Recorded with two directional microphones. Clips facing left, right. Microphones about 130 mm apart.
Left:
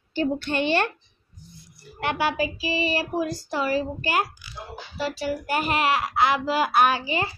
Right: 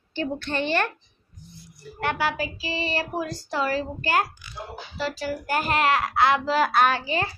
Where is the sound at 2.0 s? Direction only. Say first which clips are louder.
Left 2 dB; 20° left (ahead or behind).